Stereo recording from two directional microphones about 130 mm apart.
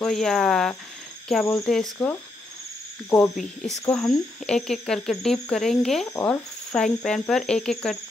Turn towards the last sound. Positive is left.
turn(degrees=5)  # may be behind; listen again after turning